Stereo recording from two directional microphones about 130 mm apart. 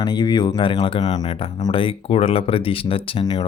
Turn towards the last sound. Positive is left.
turn(degrees=45)  # may be behind; listen again after turning